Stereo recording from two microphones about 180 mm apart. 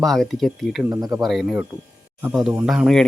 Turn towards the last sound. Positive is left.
turn(degrees=0)  # may be behind; listen again after turning